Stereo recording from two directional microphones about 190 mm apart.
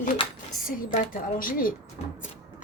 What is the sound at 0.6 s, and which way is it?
A woman's voice, 45° left (ahead or behind).